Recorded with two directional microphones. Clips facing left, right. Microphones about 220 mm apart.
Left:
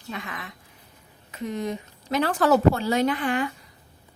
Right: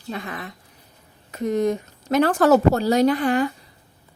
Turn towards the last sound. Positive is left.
turn(degrees=-40)  # may be behind; listen again after turning